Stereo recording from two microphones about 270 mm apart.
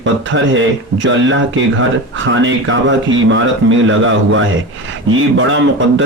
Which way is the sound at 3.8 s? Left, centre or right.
Right.